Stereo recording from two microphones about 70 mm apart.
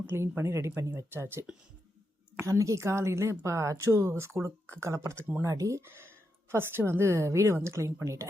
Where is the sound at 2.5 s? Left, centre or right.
Right.